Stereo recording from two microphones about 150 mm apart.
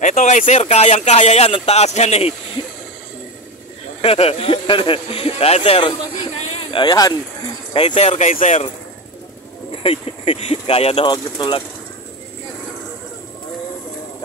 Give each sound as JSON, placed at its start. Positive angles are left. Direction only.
{"t": 0.0, "sound": "speech", "side_deg": 55}
{"t": 4.0, "sound": "speech", "side_deg": 40}
{"t": 7.7, "sound": "speech", "side_deg": 35}
{"t": 9.8, "sound": "speech", "side_deg": 40}
{"t": 11.1, "sound": "speech", "side_deg": 30}